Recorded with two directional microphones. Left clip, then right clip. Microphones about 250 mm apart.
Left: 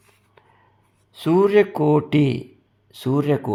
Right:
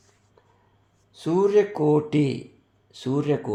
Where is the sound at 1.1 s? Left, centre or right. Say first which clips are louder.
Left 4 dB; left.